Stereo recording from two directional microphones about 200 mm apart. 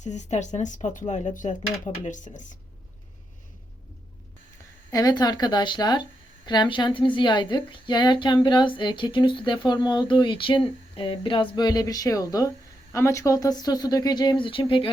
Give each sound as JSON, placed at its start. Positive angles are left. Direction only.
{"t": 0.0, "sound": "speech", "side_deg": 35}
{"t": 4.9, "sound": "a woman's voice", "side_deg": 20}